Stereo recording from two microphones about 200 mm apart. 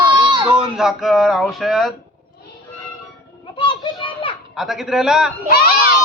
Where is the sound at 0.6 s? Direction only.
Centre (ahead or behind).